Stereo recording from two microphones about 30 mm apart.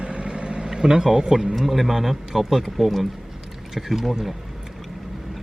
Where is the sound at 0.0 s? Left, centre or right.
Right.